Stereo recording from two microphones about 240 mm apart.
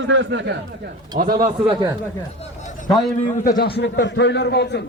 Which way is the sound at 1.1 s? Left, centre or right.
Right.